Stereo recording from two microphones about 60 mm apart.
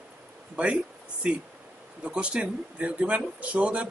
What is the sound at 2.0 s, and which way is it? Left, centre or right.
Speech, centre.